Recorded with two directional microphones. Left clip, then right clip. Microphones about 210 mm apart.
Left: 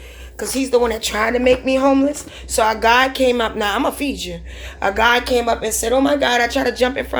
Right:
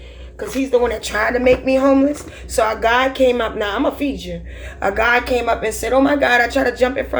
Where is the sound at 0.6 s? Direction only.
35° left (ahead or behind).